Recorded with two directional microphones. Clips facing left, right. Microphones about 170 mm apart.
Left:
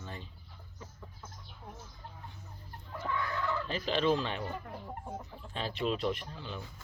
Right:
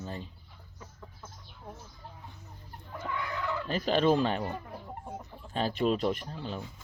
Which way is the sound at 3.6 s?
45° right (ahead or behind).